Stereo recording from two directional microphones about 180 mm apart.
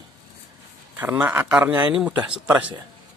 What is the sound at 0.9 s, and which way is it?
Speech, 10° right (ahead or behind).